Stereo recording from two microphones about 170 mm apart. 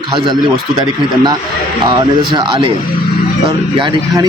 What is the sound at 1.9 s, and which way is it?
A man's voice, 25° right (ahead or behind).